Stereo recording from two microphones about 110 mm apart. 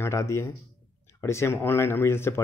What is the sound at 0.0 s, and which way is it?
Speech, 25° left (ahead or behind).